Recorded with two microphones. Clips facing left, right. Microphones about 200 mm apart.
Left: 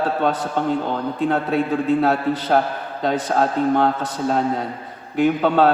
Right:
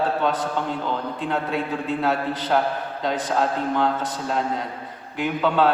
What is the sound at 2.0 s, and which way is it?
A man's voice, 50° left (ahead or behind).